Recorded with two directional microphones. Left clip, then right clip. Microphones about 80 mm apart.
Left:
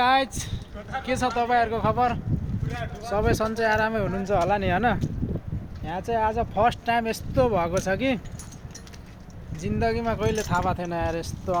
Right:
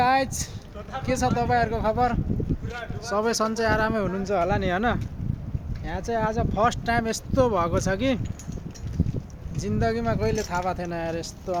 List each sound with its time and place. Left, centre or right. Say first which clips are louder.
0.0 s a sound: even; centre
1.0 s speech: even; centre
3.1 s speech: even; right
4.2 s speech: left 2 dB; right
5.8 s speech: left 2 dB; right
6.3 s speech: left 1 dB; right
9.6 s speech: even; right
10.0 s speech: even; right
11.1 s speech: left 1 dB; centre